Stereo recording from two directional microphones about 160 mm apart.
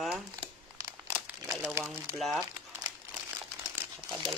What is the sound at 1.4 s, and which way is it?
Speech, 15° right (ahead or behind).